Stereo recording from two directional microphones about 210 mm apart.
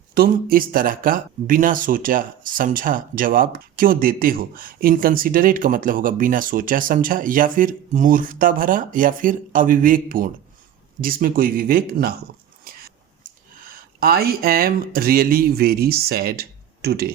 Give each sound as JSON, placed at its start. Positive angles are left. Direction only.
{"t": 0.1, "sound": "speech", "side_deg": -45}
{"t": 13.2, "sound": "speech", "side_deg": -45}